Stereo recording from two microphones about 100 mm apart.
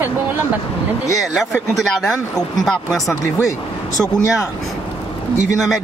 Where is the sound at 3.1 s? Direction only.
30° left (ahead or behind).